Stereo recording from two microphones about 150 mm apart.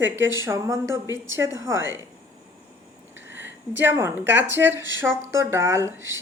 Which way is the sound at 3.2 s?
15° right (ahead or behind).